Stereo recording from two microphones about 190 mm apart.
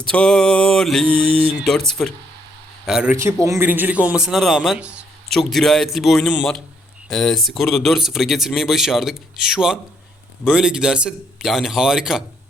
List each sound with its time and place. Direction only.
0.1 s speech: 5° left (ahead or behind)
1.3 s speech: 30° right (ahead or behind)
1.5 s speech: centre (ahead or behind)
3.2 s speech: 15° right (ahead or behind)